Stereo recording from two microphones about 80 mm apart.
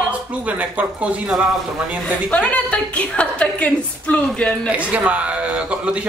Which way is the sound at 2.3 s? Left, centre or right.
Centre.